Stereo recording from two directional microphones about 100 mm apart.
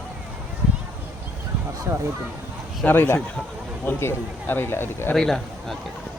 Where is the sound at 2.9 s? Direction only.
20° left (ahead or behind).